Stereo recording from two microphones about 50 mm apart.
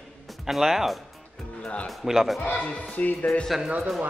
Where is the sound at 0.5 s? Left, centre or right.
Centre.